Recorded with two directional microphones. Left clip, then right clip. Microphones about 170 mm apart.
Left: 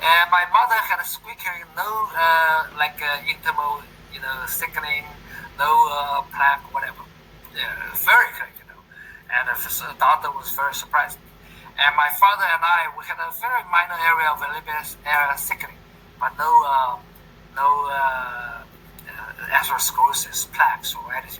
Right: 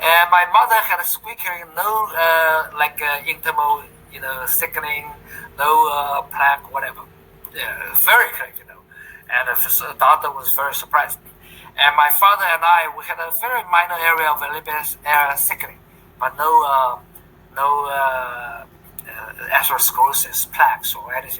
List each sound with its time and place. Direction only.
0.0 s a man's voice: 25° right (ahead or behind)